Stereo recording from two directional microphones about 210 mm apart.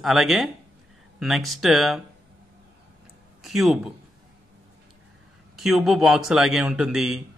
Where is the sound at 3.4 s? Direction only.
Centre (ahead or behind).